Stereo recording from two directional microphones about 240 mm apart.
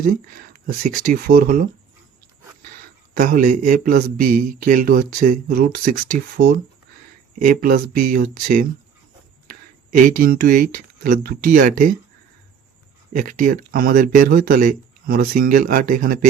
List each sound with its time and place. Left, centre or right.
0.5 s a man's voice: right
3.2 s a man's voice: right
10.1 s a man's voice: right
13.1 s a man's voice: right